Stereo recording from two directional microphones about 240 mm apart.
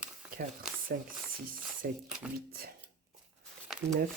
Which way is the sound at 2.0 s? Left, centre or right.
Centre.